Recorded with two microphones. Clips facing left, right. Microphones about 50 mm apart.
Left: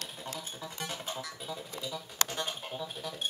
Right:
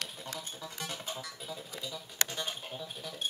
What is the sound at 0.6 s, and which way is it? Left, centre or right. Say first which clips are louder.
Music: left 3 dB; centre.